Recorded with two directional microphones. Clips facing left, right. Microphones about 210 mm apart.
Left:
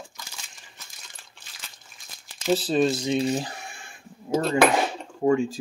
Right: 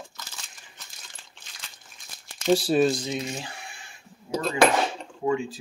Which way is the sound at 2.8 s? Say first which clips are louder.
Even; 10° left (ahead or behind).